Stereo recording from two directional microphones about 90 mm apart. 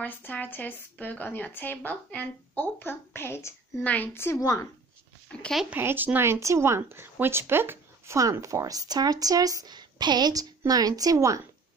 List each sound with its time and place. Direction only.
0.0 s speech: 20° left (ahead or behind)
2.8 s speech: 25° left (ahead or behind)
3.8 s speech: 20° left (ahead or behind)
4.4 s speech: 35° left (ahead or behind)
5.7 s speech: 20° right (ahead or behind)
8.2 s speech: 35° right (ahead or behind)